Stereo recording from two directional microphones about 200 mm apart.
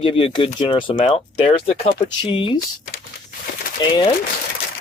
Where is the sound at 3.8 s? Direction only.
20° left (ahead or behind).